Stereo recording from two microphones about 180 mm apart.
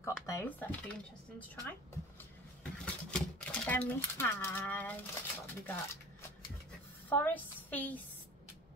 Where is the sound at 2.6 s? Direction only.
5° left (ahead or behind).